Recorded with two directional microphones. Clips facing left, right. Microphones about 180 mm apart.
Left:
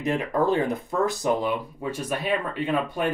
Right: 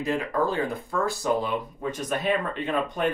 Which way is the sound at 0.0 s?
20° left (ahead or behind).